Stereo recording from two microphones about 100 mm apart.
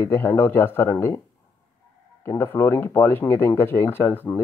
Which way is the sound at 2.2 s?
25° left (ahead or behind).